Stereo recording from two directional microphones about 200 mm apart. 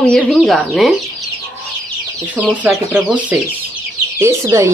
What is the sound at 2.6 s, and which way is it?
Speech, 5° right (ahead or behind).